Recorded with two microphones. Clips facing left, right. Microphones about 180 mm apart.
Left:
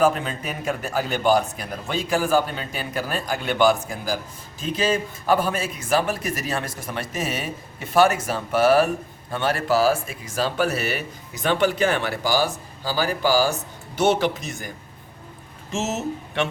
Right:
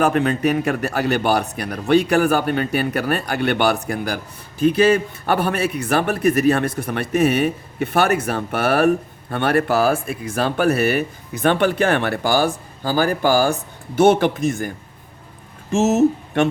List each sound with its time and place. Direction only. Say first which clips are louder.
0.0 s speech: right 4 dB; 65° right (ahead or behind)
15.7 s speech: right 11 dB; 50° right (ahead or behind)